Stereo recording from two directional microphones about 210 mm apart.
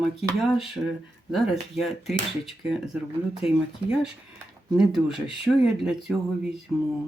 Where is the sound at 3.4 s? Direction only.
30° left (ahead or behind).